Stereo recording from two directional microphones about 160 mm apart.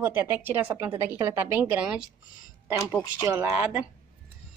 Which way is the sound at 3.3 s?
15° right (ahead or behind).